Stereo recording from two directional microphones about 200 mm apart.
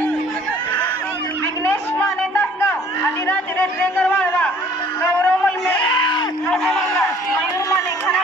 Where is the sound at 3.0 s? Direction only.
10° left (ahead or behind).